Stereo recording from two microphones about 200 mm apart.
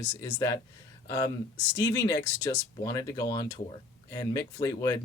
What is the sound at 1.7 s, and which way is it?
Speech, 15° left (ahead or behind).